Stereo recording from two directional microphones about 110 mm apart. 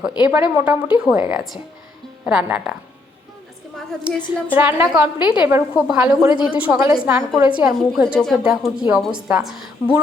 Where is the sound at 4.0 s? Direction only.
10° right (ahead or behind).